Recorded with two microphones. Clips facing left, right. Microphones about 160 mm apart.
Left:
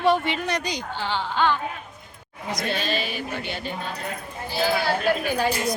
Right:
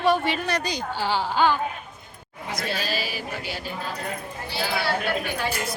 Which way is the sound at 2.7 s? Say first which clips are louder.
Left 2 dB; 5° right (ahead or behind).